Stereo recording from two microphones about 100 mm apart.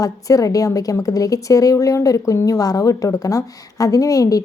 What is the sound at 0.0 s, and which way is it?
A woman's voice, 35° left (ahead or behind).